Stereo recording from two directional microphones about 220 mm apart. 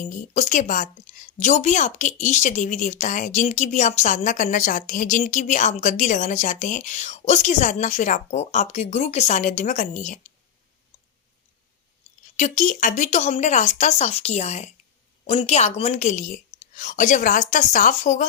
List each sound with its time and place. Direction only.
0.1 s a woman's voice: 35° left (ahead or behind)
12.4 s a woman's voice: 35° left (ahead or behind)